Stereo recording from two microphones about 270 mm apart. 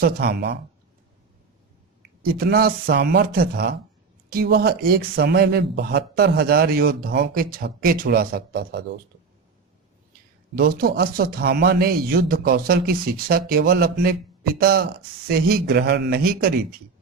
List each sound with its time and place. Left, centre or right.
0.0 s a man's voice: right
2.2 s a man's voice: right
10.5 s a man's voice: right